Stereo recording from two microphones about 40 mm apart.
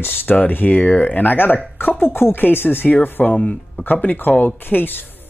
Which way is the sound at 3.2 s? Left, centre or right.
Left.